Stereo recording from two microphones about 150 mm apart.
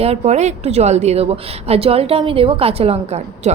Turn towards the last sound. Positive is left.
turn(degrees=-45)  # may be behind; listen again after turning